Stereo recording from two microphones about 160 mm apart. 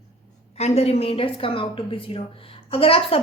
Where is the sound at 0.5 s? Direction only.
40° left (ahead or behind).